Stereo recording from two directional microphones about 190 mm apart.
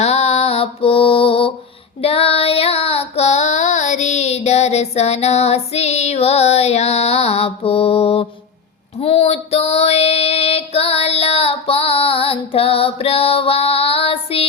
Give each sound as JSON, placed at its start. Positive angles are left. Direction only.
{"t": 0.0, "sound": "mantra", "side_deg": 35}
{"t": 2.0, "sound": "child singing", "side_deg": 30}
{"t": 9.0, "sound": "female singing", "side_deg": 30}